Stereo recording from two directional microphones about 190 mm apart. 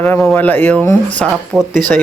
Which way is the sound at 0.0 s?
10° left (ahead or behind).